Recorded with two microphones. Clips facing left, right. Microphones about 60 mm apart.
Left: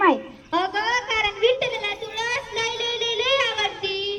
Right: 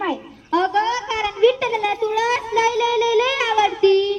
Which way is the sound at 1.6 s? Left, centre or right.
Right.